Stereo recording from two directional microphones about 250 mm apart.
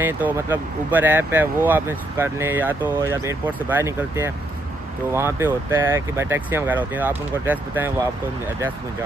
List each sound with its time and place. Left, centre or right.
0.0 s speech: centre